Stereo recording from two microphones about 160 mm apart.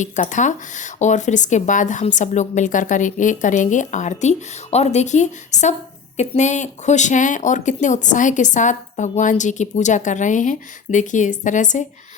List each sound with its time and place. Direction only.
0.0 s speech: 50° left (ahead or behind)